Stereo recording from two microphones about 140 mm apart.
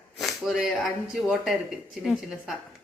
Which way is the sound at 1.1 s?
5° right (ahead or behind).